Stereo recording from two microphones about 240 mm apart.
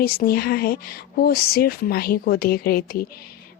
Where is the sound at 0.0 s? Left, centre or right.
Left.